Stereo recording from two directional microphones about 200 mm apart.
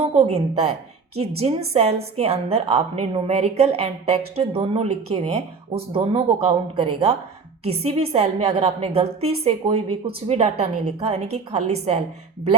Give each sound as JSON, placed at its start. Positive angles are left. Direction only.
{"t": 0.0, "sound": "a woman's voice", "side_deg": -30}